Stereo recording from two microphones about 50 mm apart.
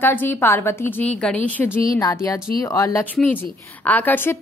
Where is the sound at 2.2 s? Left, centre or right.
Left.